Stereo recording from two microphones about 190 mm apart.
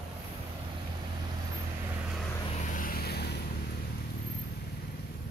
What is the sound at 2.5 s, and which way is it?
Vehicle, 40° left (ahead or behind).